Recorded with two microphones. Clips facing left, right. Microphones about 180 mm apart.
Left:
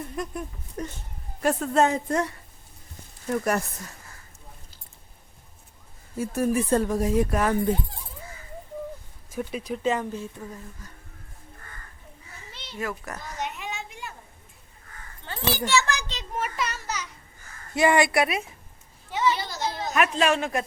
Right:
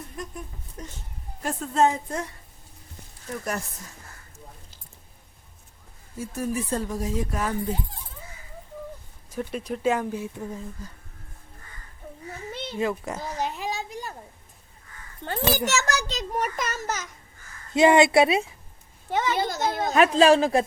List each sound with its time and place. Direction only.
0.8 s speech: 60° left (ahead or behind)
6.1 s speech: 60° left (ahead or behind)
9.3 s speech: 5° left (ahead or behind); by 10.6 s 15° right (ahead or behind)
12.5 s oink: 50° right (ahead or behind)
12.7 s a sound: 25° right (ahead or behind)
15.2 s a child's voice: 45° right (ahead or behind)
17.7 s a woman's voice: 20° right (ahead or behind)
19.1 s a child's voice: 50° right (ahead or behind)
19.9 s speech: 30° right (ahead or behind)